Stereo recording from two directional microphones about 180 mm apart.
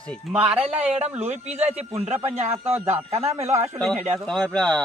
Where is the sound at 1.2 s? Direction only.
40° right (ahead or behind).